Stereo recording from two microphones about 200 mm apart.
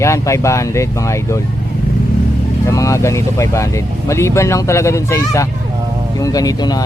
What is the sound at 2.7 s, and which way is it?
Speech, 15° left (ahead or behind).